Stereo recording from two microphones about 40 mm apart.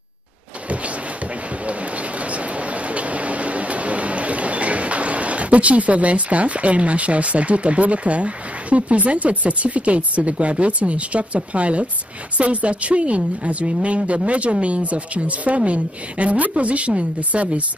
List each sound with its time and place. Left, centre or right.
1.7 s a woman's voice: right